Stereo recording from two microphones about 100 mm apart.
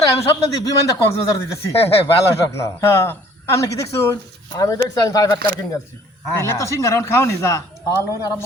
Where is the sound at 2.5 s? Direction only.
25° left (ahead or behind).